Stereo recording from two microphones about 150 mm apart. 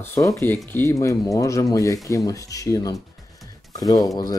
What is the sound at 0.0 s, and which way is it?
Speech, 20° left (ahead or behind).